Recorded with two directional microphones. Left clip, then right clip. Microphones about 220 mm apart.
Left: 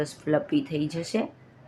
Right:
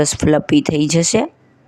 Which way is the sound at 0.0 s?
50° right (ahead or behind).